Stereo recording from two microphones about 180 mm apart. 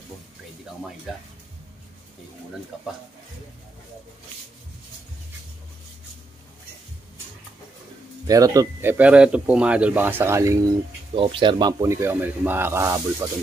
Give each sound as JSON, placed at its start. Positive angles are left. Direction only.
{"t": 2.7, "sound": "speech", "side_deg": -5}
{"t": 8.3, "sound": "speech", "side_deg": -20}
{"t": 11.1, "sound": "speech", "side_deg": -30}